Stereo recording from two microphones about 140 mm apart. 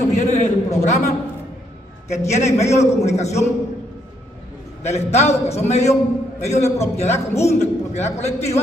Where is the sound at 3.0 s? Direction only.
50° left (ahead or behind).